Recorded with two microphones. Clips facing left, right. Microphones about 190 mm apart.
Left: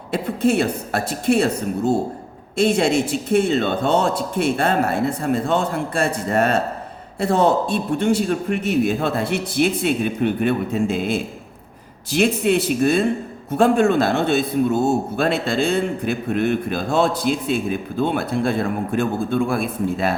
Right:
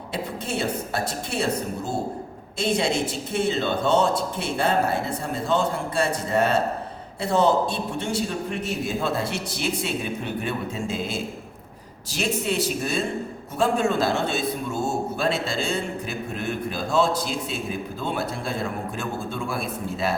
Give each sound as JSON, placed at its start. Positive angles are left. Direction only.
{"t": 0.1, "sound": "a man's voice", "side_deg": 60}
{"t": 2.6, "sound": "a man's voice", "side_deg": 55}